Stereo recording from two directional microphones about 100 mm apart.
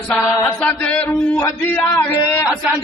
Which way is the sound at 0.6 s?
15° left (ahead or behind).